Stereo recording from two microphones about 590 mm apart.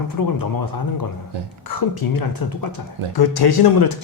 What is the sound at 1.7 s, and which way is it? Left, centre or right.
A man's voice, left.